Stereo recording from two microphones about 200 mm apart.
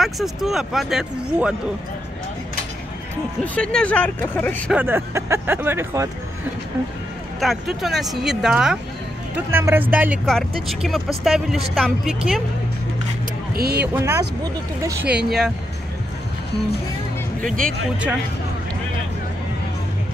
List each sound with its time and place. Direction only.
0.0 s speech: centre (ahead or behind)
3.5 s speech: 5° left (ahead or behind)
4.7 s speech: 10° right (ahead or behind)
7.3 s speech: centre (ahead or behind)
13.5 s speech: 50° right (ahead or behind)
13.9 s speech: 10° right (ahead or behind)